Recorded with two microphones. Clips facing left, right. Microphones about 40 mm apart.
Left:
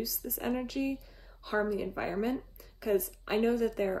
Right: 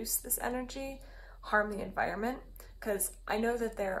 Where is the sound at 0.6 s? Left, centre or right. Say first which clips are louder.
Left 7 dB; left.